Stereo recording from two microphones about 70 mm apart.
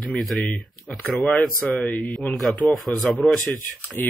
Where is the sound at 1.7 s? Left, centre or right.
Centre.